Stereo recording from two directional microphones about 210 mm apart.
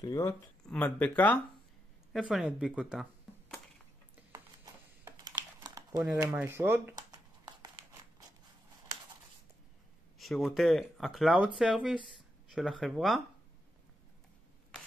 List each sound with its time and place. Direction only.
0.0 s speech: 15° left (ahead or behind); by 3.5 s centre (ahead or behind)
5.0 s crumpling: 20° right (ahead or behind)
10.1 s speech: centre (ahead or behind)